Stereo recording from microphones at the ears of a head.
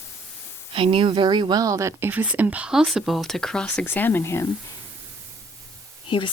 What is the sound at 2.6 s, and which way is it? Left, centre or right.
Speech, centre.